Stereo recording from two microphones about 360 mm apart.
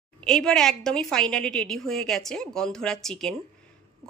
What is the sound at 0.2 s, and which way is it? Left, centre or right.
Speech, centre.